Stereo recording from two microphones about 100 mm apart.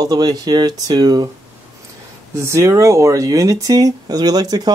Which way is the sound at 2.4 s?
30° right (ahead or behind).